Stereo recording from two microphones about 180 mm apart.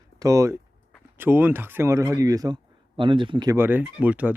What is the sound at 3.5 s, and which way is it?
Speech, 10° right (ahead or behind).